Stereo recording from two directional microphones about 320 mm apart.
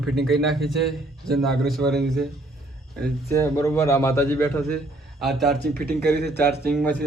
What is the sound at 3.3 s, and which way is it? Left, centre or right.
A man's voice, centre.